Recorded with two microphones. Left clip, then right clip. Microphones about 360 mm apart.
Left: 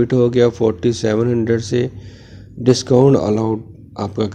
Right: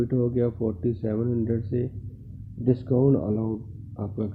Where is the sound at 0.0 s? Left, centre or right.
Left.